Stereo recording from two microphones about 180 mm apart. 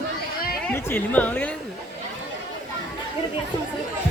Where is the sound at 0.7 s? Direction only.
10° left (ahead or behind).